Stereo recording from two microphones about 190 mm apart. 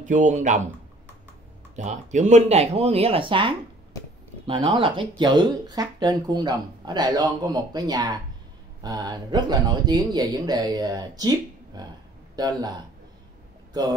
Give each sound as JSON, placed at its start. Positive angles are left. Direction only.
{"t": 0.0, "sound": "speech", "side_deg": -40}
{"t": 1.8, "sound": "speech", "side_deg": -40}